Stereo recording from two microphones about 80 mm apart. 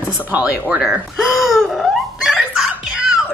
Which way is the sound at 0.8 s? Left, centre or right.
Centre.